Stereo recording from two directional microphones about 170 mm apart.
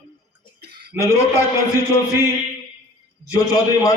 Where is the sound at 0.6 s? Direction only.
70° right (ahead or behind).